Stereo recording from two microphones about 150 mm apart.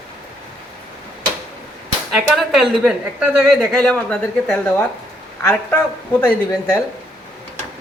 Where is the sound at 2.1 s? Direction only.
Centre (ahead or behind); by 6.7 s 15° left (ahead or behind).